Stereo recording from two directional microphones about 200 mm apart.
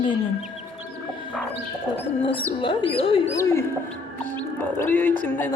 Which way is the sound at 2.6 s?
25° left (ahead or behind).